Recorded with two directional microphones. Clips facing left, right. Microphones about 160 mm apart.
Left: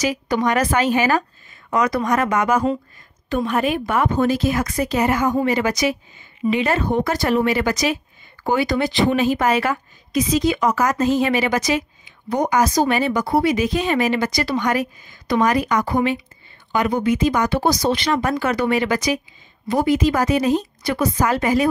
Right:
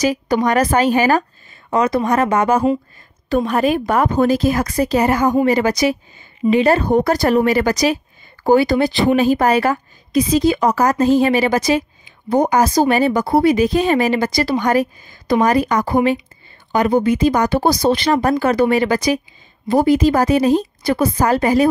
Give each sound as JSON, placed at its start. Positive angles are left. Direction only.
{"t": 0.0, "sound": "a woman's voice", "side_deg": -35}